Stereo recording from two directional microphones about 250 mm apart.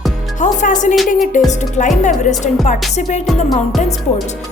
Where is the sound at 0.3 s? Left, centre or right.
Left.